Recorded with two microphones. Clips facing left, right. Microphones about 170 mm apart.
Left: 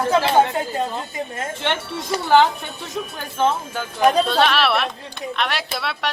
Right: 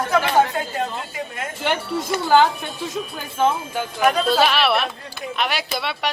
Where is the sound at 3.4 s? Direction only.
10° right (ahead or behind).